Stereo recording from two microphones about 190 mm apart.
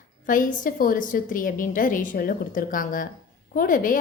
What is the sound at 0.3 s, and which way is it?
A woman's voice, 45° left (ahead or behind).